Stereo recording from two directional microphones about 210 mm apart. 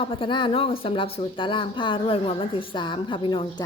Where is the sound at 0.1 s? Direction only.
25° left (ahead or behind).